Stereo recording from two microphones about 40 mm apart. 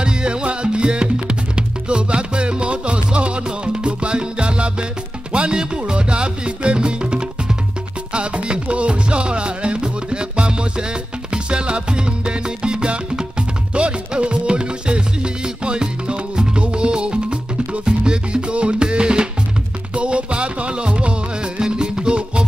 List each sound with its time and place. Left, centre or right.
0.0 s music: right